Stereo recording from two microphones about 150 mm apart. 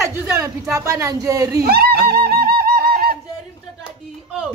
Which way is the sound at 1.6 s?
90° right.